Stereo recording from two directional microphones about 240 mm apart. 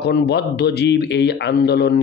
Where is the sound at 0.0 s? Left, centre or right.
Left.